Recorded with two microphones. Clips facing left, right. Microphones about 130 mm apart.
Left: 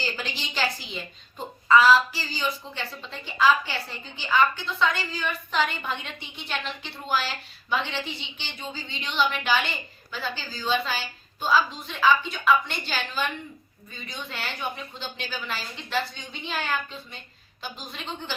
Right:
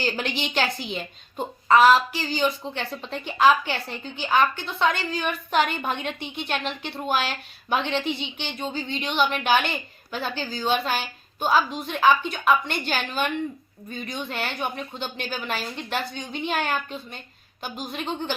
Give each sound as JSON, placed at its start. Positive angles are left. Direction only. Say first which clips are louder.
{"t": 0.0, "sound": "a woman's voice", "louder": "right 6 dB", "side_deg": -60}